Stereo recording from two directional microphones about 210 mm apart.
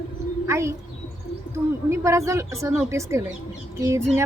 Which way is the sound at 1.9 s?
15° right (ahead or behind).